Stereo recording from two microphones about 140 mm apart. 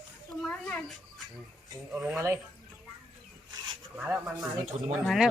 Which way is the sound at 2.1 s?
20° right (ahead or behind).